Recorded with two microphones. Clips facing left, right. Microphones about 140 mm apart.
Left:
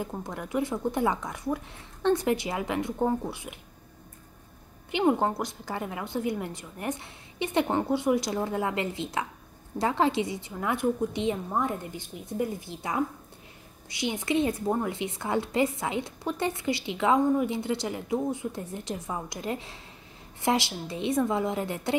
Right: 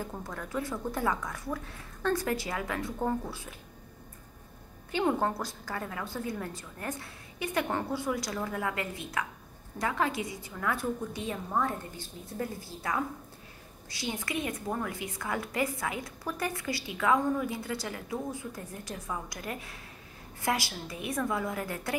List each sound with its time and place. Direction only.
0.0 s a woman's voice: 15° left (ahead or behind)
4.9 s a woman's voice: 20° left (ahead or behind)